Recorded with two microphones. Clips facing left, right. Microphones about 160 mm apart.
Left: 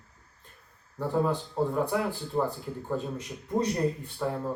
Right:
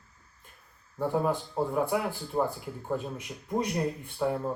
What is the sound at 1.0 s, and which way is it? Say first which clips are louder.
Speech: even; 15° right (ahead or behind).